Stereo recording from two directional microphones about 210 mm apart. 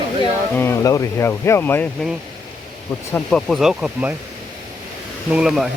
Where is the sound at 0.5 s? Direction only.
10° left (ahead or behind).